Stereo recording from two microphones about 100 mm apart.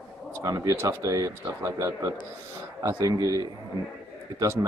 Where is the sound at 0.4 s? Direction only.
30° right (ahead or behind).